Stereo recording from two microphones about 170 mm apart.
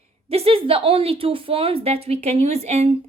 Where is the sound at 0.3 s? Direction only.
35° right (ahead or behind).